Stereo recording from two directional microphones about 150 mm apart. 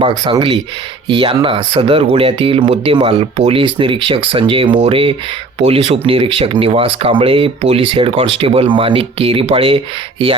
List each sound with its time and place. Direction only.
0.3 s speech: 35° right (ahead or behind)